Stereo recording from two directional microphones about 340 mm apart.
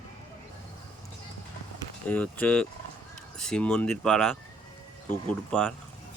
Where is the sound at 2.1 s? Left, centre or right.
Centre.